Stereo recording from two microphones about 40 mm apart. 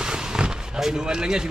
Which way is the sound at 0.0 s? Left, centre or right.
Centre.